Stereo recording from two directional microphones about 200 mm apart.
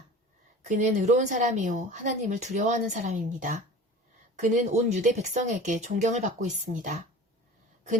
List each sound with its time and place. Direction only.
0.6 s a woman's voice: 35° right (ahead or behind)